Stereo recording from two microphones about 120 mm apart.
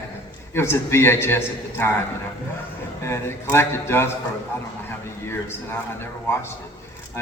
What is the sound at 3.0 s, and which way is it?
A man's voice, 20° left (ahead or behind).